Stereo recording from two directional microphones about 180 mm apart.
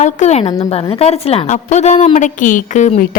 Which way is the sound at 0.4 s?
20° left (ahead or behind).